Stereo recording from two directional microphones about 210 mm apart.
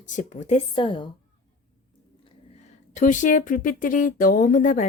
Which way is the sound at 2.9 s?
35° left (ahead or behind).